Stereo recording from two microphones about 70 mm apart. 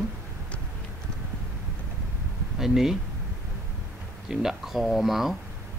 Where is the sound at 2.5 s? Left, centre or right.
Centre.